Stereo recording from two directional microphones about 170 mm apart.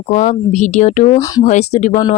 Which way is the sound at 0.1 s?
45° left (ahead or behind).